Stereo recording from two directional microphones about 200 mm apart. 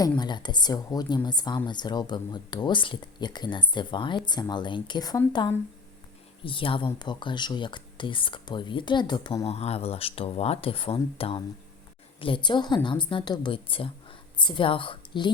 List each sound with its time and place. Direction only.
0.2 s a woman's voice: 20° left (ahead or behind)